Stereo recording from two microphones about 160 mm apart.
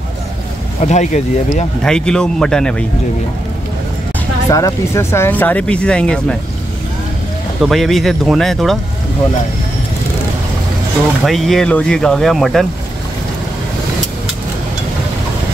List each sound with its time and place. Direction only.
0.8 s speech: 45° left (ahead or behind)
1.8 s speech: 5° left (ahead or behind)
4.5 s speech: 20° left (ahead or behind); by 6.3 s 5° left (ahead or behind)
7.6 s speech: centre (ahead or behind)
11.2 s speech: centre (ahead or behind)